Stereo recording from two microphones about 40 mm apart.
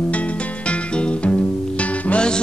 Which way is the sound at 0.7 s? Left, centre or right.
Left.